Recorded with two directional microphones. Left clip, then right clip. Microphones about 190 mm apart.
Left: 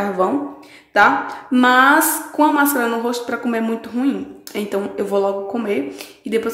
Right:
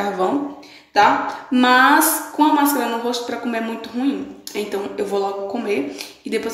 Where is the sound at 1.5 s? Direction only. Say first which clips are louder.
Left 1 dB; 30° left (ahead or behind).